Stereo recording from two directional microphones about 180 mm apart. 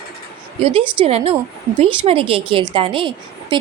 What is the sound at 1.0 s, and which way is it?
A woman's voice, 35° right (ahead or behind).